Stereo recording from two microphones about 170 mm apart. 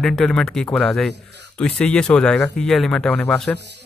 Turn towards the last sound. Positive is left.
turn(degrees=-90)